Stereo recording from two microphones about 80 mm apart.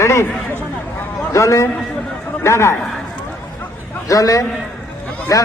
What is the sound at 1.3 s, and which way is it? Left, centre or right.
A man's voice, left.